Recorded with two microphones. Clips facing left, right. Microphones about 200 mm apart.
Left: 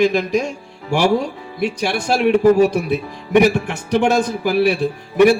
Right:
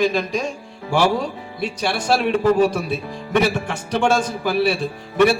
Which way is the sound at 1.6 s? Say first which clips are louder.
Left 3 dB; 15° left (ahead or behind).